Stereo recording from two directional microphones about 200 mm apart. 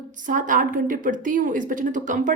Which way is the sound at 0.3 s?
40° right (ahead or behind).